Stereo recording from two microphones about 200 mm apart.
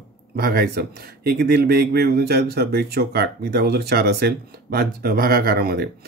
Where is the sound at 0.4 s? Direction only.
50° right (ahead or behind).